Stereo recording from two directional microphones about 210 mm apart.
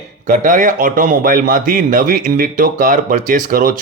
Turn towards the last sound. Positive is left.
turn(degrees=-40)  # may be behind; listen again after turning